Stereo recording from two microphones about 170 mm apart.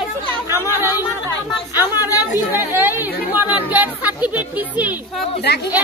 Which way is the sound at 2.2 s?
10° right (ahead or behind).